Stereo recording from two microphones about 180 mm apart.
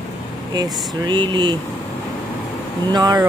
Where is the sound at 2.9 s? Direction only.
20° right (ahead or behind).